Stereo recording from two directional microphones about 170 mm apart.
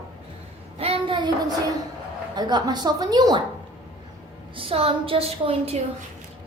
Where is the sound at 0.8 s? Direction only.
35° right (ahead or behind).